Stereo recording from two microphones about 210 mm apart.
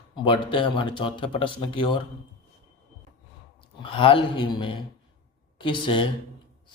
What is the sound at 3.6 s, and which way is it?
Speech, 25° left (ahead or behind).